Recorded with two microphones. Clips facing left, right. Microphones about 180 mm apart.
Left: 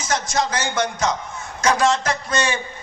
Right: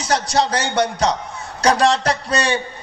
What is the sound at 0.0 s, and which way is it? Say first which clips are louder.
A man's voice: right 4 dB; 35° right (ahead or behind).